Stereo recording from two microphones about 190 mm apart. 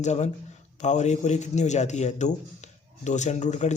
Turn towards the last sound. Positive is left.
turn(degrees=40)  # may be behind; listen again after turning